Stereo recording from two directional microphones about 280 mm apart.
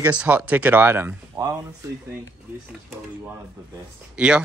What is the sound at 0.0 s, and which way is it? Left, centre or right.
Speech, centre.